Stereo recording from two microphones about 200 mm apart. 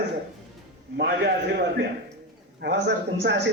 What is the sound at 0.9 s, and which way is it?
Speech, 55° right (ahead or behind).